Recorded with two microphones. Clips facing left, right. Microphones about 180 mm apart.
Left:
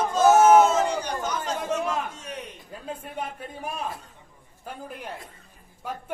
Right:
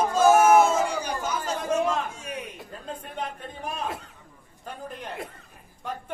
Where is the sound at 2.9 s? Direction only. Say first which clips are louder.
Left 1 dB; 10° left (ahead or behind).